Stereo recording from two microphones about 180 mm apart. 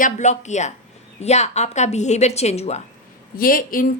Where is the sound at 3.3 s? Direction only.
50° left (ahead or behind).